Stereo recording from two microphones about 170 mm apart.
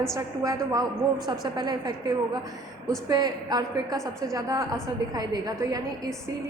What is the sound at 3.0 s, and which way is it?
Speech, 25° right (ahead or behind).